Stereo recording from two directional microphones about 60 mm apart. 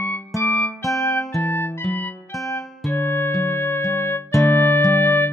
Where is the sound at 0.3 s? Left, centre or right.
Centre.